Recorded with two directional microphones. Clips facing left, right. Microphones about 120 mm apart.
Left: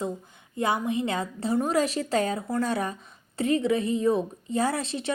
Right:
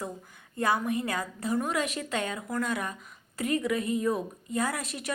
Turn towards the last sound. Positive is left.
turn(degrees=25)  # may be behind; listen again after turning